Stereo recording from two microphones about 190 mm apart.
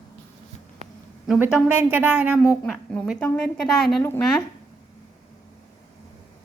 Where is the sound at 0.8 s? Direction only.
35° right (ahead or behind).